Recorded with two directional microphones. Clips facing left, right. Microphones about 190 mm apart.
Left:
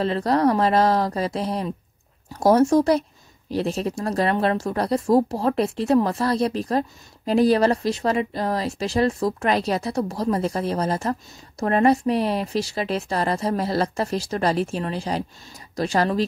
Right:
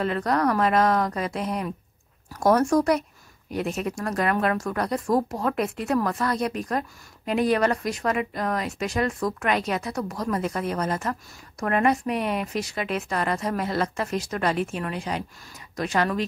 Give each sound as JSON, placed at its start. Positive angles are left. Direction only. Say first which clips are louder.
{"t": 0.0, "sound": "speech", "louder": "left 4 dB", "side_deg": 30}